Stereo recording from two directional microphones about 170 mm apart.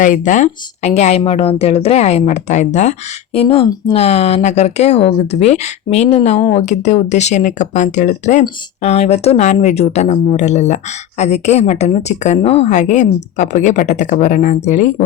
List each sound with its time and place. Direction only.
0.0 s a woman's voice: 50° left (ahead or behind)
3.3 s a woman's voice: 35° left (ahead or behind)